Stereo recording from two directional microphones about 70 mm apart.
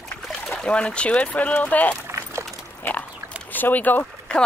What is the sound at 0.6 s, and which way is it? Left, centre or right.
Speech, centre.